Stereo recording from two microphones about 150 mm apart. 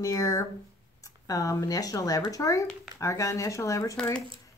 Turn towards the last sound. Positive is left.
turn(degrees=20)  # may be behind; listen again after turning